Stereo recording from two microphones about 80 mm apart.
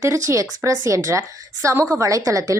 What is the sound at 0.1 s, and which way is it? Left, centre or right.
A woman's voice, right.